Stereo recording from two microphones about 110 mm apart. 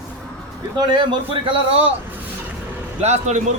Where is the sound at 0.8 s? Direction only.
40° right (ahead or behind); by 1.9 s 60° right (ahead or behind).